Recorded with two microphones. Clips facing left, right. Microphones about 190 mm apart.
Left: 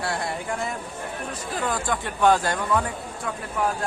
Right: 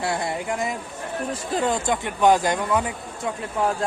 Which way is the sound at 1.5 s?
25° right (ahead or behind).